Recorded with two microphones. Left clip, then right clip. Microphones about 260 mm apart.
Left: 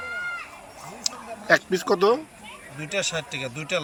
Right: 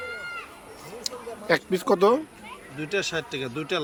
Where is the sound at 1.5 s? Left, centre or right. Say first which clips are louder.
Left 2 dB; centre.